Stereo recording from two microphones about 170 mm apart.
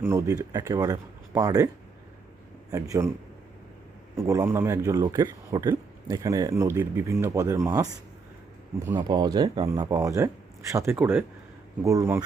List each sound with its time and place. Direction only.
0.0 s a man's voice: 15° right (ahead or behind)
4.2 s a man's voice: 15° right (ahead or behind)
8.9 s a man's voice: 25° right (ahead or behind)